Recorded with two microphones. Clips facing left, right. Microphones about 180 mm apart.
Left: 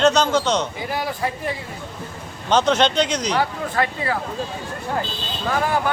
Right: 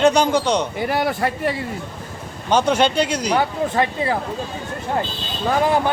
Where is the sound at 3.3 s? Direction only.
20° right (ahead or behind).